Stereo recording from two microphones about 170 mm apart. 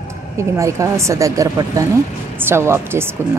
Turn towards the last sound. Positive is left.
turn(degrees=-15)  # may be behind; listen again after turning